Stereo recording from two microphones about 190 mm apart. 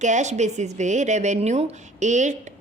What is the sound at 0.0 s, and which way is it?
Speech, 40° right (ahead or behind).